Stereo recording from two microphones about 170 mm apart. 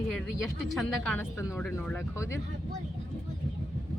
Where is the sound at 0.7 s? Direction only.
5° left (ahead or behind).